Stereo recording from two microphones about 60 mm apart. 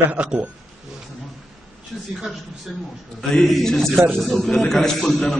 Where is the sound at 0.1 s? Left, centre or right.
Centre.